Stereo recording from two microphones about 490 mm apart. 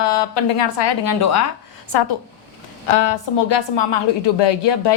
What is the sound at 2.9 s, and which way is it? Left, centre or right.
A woman's voice, left.